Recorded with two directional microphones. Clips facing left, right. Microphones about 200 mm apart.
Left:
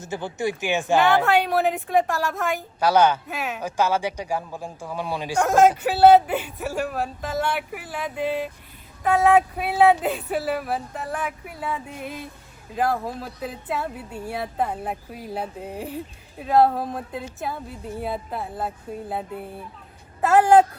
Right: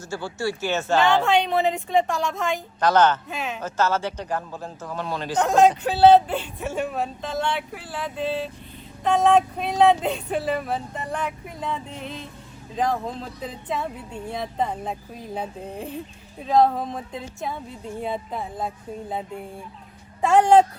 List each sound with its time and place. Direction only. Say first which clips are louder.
0.0 s speech: left 1 dB; 20° left (ahead or behind)
20.2 s speech: even; 5° left (ahead or behind)